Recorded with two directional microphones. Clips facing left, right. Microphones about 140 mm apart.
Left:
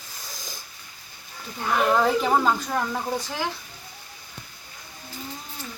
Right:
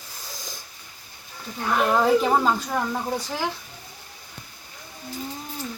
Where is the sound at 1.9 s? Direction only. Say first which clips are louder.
Right 3 dB; 5° right (ahead or behind).